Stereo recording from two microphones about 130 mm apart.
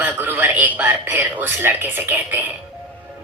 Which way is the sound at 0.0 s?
15° right (ahead or behind).